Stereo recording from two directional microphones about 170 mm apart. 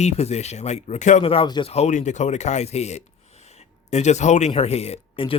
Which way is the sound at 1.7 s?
40° left (ahead or behind).